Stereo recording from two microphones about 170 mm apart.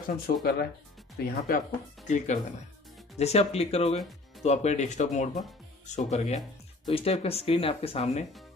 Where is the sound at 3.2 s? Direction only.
40° left (ahead or behind).